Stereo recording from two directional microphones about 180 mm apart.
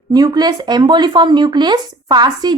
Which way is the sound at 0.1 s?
20° right (ahead or behind).